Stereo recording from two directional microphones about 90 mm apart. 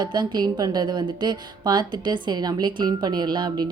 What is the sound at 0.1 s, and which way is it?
A woman's voice, 55° right (ahead or behind).